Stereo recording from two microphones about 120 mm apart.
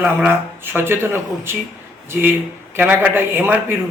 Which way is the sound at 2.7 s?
15° right (ahead or behind).